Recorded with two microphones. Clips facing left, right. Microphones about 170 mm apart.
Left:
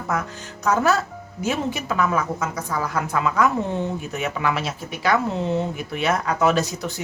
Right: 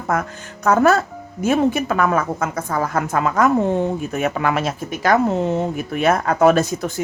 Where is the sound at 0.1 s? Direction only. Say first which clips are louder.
Right 5 dB; 55° right (ahead or behind).